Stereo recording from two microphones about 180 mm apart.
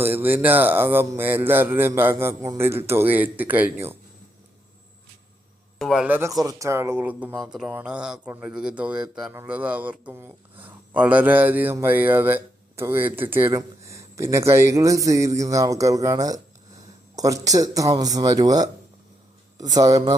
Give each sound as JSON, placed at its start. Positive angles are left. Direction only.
{"t": 0.0, "sound": "speech", "side_deg": -10}
{"t": 5.8, "sound": "a man's voice", "side_deg": 0}